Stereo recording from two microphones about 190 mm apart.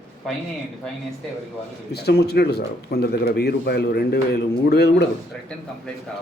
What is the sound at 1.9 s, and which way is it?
Speech, 60° left (ahead or behind).